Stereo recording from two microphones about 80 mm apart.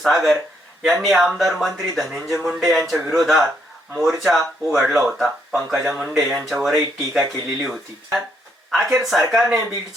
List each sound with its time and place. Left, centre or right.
0.0 s speech: centre